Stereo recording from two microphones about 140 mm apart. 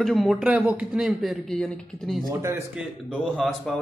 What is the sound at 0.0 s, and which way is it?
Speech, centre (ahead or behind).